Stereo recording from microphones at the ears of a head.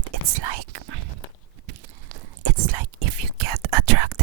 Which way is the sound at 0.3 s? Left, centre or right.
Right.